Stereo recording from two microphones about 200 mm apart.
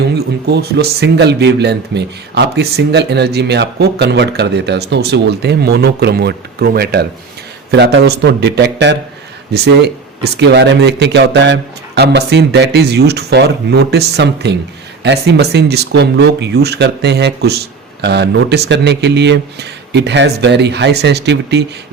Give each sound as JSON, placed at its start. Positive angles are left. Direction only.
{"t": 0.4, "sound": "speech", "side_deg": -55}